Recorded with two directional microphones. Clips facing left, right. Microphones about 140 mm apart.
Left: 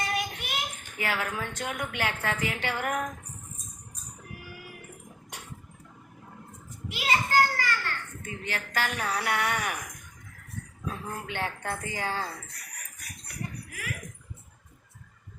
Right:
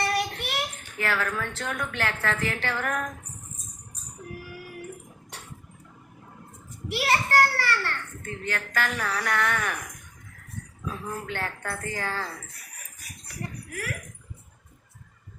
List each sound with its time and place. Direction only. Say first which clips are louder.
0.0 s child singing: right 4 dB; 70° right (ahead or behind)
0.9 s a woman's voice: right 3 dB; 15° left (ahead or behind)
6.9 s a sound: right 2 dB; 70° right (ahead or behind)
8.2 s a woman's voice: right 5 dB; 15° left (ahead or behind)
8.5 s a woman's voice: right 1 dB; 25° left (ahead or behind)
9.1 s a woman's voice: right 2 dB; 15° left (ahead or behind)
11.3 s a woman's voice: even; 20° left (ahead or behind)